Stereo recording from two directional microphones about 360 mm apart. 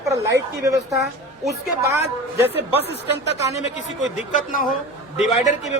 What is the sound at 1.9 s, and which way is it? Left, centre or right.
Speech, centre.